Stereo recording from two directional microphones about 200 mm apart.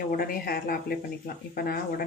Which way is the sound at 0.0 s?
45° left (ahead or behind).